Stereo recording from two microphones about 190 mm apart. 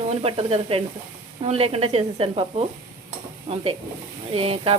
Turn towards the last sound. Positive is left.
turn(degrees=-30)  # may be behind; listen again after turning